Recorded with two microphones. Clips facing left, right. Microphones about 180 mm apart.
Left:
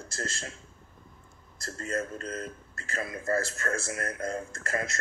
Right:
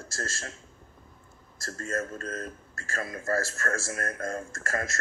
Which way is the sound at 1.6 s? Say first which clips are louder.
Even; 20° left (ahead or behind).